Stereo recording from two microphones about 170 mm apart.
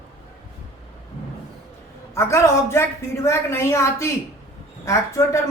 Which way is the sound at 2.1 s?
15° left (ahead or behind).